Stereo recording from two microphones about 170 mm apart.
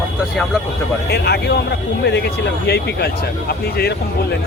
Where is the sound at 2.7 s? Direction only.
70° left (ahead or behind).